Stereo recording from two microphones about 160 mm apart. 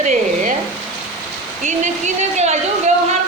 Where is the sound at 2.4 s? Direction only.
45° right (ahead or behind).